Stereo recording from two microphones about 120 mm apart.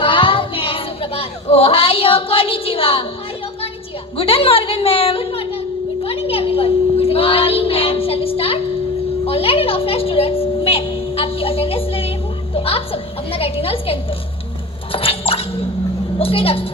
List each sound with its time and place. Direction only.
0.0 s child singing: 45° left (ahead or behind)
4.2 s a woman's voice: 50° left (ahead or behind)
6.0 s child singing: 50° left (ahead or behind)
9.2 s a sound: 55° left (ahead or behind)
12.5 s a woman's voice: 55° left (ahead or behind)
14.9 s a sound: 50° left (ahead or behind)
16.1 s a woman's voice: 50° left (ahead or behind)